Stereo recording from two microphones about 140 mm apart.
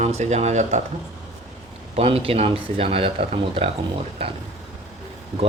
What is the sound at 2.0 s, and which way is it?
Speech, 45° right (ahead or behind).